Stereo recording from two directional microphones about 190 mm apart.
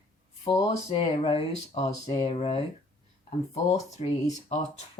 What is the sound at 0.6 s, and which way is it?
Speech, 30° left (ahead or behind).